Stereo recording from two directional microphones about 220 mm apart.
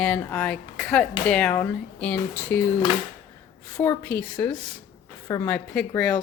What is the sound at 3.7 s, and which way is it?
Speech, 15° left (ahead or behind).